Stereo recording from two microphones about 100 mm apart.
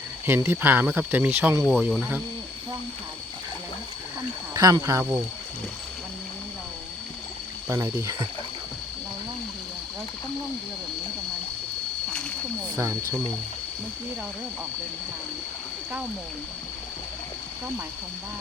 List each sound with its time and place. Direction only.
0.3 s speech: 25° right (ahead or behind)
1.6 s speech: 5° right (ahead or behind)
4.5 s speech: 35° right (ahead or behind)
7.7 s speech: 30° right (ahead or behind)